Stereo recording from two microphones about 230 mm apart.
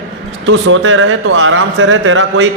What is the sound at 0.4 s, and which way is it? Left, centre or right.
A man's voice, right.